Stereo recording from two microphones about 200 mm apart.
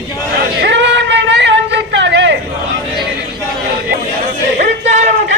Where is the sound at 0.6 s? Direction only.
65° right (ahead or behind).